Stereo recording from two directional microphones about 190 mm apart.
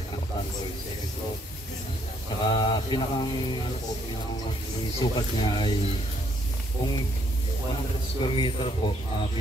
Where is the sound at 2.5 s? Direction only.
25° left (ahead or behind).